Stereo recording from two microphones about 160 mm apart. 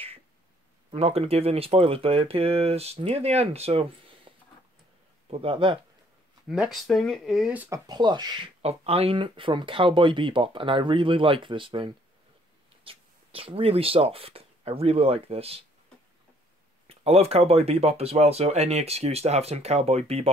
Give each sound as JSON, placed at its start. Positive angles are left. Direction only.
{"t": 0.9, "sound": "speech", "side_deg": -40}
{"t": 5.3, "sound": "speech", "side_deg": -35}
{"t": 6.4, "sound": "speech", "side_deg": -5}
{"t": 7.7, "sound": "speech", "side_deg": -25}
{"t": 8.6, "sound": "speech", "side_deg": -40}
{"t": 16.8, "sound": "speech", "side_deg": -40}